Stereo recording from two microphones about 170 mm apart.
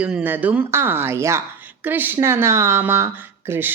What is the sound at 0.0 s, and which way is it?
A woman's voice, 10° right (ahead or behind).